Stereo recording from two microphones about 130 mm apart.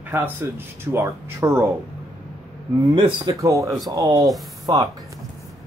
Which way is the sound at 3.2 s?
25° right (ahead or behind).